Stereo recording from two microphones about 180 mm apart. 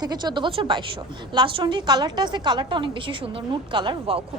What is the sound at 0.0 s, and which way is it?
A woman's voice, 25° right (ahead or behind).